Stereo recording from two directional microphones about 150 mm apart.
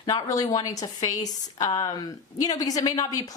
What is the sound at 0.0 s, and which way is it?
A woman's voice, 25° left (ahead or behind).